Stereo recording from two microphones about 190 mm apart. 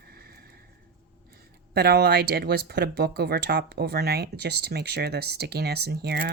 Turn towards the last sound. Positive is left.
turn(degrees=-55)  # may be behind; listen again after turning